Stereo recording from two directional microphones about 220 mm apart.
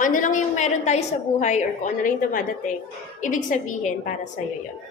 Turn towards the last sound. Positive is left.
turn(degrees=35)  # may be behind; listen again after turning